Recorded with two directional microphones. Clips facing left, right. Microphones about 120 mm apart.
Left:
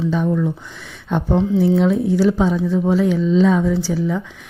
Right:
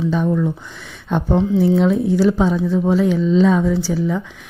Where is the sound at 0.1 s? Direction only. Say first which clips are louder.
Right 1 dB; 30° right (ahead or behind); by 4.2 s 15° right (ahead or behind).